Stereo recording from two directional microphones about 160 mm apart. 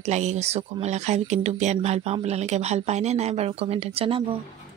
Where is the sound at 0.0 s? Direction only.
45° right (ahead or behind).